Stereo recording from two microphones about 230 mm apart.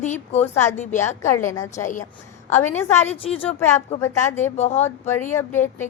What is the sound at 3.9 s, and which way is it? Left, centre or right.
Speech, left.